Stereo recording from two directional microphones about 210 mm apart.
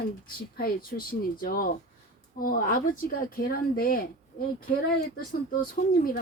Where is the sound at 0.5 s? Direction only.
45° left (ahead or behind).